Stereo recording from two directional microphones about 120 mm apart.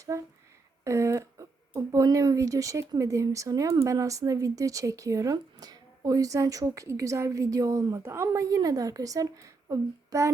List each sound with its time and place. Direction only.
0.1 s a woman's voice: 25° right (ahead or behind)